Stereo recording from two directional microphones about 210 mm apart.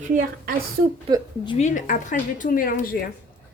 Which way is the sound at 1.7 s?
35° left (ahead or behind).